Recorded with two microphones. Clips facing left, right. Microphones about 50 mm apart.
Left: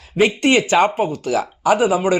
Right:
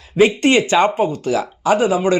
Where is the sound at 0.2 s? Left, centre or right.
Centre.